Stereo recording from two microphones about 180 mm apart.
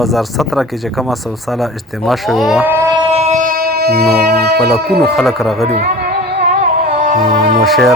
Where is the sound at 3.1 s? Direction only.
35° right (ahead or behind); by 4.7 s 65° right (ahead or behind).